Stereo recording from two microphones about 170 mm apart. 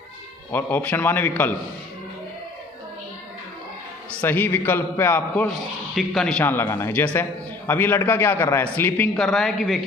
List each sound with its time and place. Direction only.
0.5 s a man's voice: 10° left (ahead or behind)
4.2 s a man's voice: 10° left (ahead or behind)
5.9 s a man's voice: centre (ahead or behind)